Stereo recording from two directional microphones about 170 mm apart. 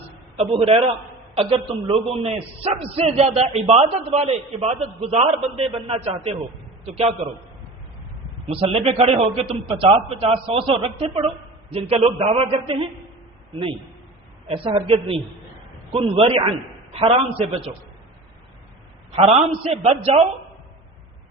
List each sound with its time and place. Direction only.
0.3 s a man's voice: 35° right (ahead or behind)
8.5 s a man's voice: 35° right (ahead or behind)
14.4 s a man's voice: 30° right (ahead or behind)
19.1 s a man's voice: 35° right (ahead or behind)